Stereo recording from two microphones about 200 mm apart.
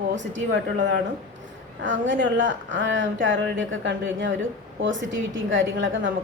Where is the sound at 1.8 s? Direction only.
65° right (ahead or behind).